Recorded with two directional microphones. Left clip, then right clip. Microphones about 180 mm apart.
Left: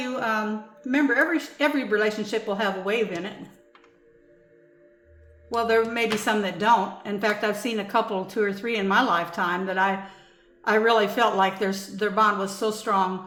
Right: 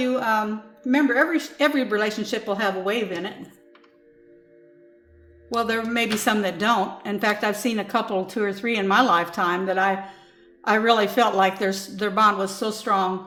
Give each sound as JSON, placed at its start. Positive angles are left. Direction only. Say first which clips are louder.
{"t": 0.0, "sound": "a sound", "louder": "right 4 dB", "side_deg": -25}
{"t": 0.9, "sound": "a woman's voice", "louder": "right 2 dB", "side_deg": -25}
{"t": 5.5, "sound": "a woman's voice", "louder": "left 1 dB", "side_deg": -30}